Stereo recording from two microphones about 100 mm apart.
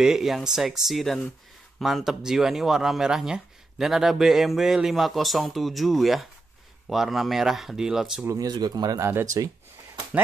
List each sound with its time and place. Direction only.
0.0 s speech: 5° right (ahead or behind)
8.3 s speech: 40° right (ahead or behind)
9.0 s speech: 30° right (ahead or behind)